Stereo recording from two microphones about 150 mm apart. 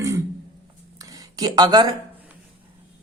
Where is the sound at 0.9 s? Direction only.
25° right (ahead or behind).